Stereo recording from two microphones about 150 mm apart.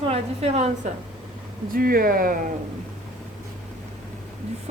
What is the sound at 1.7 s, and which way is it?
Speech, 75° right (ahead or behind).